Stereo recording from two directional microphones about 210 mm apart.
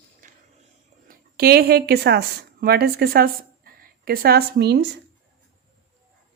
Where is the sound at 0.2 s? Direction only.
40° right (ahead or behind).